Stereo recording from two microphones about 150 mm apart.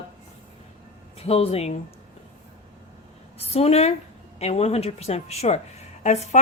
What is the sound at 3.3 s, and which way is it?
A woman's voice, 40° left (ahead or behind).